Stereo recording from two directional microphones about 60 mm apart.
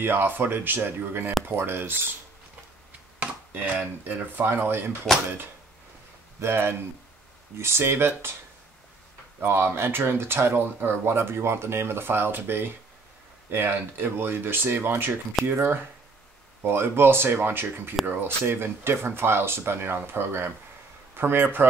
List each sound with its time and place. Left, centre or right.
0.0 s speech: right
3.2 s speech: right
4.5 s speech: right
6.4 s speech: right
9.5 s speech: right